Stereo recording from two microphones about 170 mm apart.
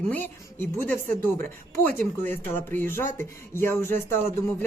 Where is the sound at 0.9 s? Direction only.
10° left (ahead or behind).